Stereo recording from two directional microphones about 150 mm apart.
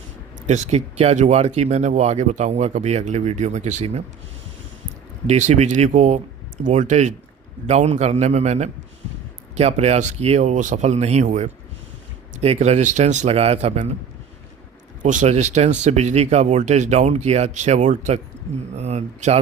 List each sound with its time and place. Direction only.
0.4 s speech: 50° right (ahead or behind)
5.2 s speech: 50° right (ahead or behind)
15.0 s speech: 55° right (ahead or behind)